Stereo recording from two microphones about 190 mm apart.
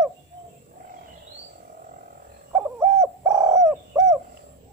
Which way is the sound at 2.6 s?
15° right (ahead or behind).